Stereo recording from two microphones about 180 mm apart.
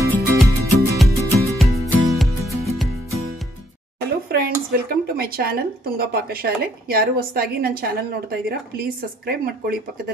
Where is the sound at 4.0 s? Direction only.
60° right (ahead or behind).